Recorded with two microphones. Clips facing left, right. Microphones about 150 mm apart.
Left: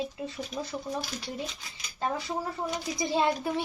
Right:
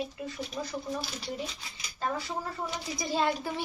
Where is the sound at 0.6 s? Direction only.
20° left (ahead or behind).